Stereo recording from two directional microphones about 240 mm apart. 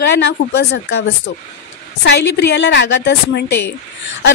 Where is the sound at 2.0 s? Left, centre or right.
Left.